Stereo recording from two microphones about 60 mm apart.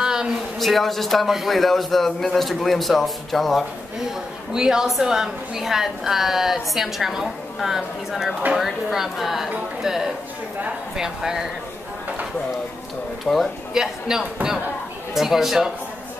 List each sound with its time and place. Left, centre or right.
0.0 s a sound: centre
0.6 s a woman's voice: centre
4.6 s a woman's voice: centre
13.3 s speech: left
13.7 s a woman's voice: centre